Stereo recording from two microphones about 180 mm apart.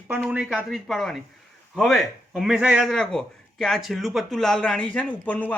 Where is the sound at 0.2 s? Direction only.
5° right (ahead or behind).